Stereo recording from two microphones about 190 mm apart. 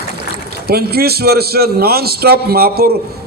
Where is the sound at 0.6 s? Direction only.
55° right (ahead or behind).